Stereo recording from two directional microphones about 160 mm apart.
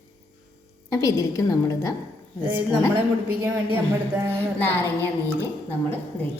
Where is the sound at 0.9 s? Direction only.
20° left (ahead or behind).